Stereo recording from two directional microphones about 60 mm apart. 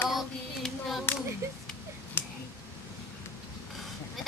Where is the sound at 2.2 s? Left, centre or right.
Left.